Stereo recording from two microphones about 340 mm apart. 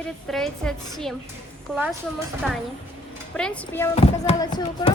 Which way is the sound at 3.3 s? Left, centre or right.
Centre.